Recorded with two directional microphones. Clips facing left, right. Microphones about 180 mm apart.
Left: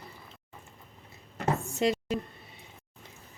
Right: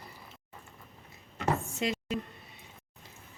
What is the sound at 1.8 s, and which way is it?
Music, 35° left (ahead or behind).